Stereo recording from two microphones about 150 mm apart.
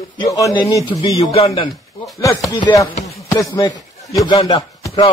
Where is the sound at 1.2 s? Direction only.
45° left (ahead or behind).